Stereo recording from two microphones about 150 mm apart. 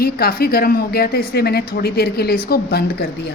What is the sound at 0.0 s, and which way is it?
A woman's voice, 80° left.